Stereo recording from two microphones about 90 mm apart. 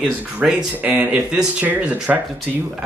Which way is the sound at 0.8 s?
20° right (ahead or behind).